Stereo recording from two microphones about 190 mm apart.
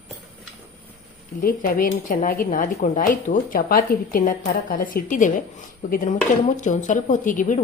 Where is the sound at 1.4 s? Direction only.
45° left (ahead or behind).